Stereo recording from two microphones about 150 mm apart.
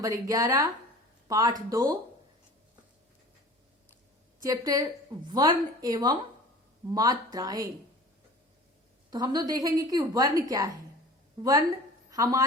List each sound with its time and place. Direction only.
0.0 s a woman's voice: 25° right (ahead or behind)
4.4 s a woman's voice: 25° right (ahead or behind)
9.0 s a woman's voice: 25° right (ahead or behind)